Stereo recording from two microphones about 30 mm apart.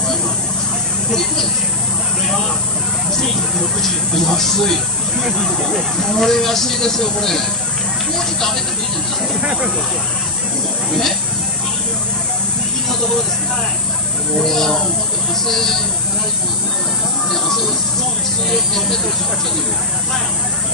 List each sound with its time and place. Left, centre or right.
3.8 s speech: centre
6.0 s speech: centre
9.4 s speech: right
14.4 s speech: centre
17.3 s a sound: centre
18.5 s speech: centre